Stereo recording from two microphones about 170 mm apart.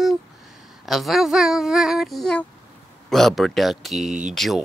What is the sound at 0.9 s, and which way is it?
Speech, centre (ahead or behind).